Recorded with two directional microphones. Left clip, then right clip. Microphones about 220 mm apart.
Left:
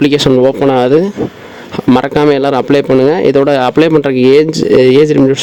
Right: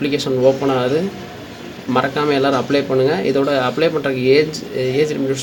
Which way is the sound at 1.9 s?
45° left (ahead or behind).